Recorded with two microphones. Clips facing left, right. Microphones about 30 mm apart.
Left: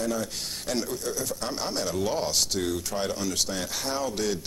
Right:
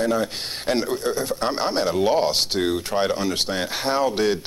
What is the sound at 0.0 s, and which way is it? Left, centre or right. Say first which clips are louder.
A man's voice: right 7 dB; right.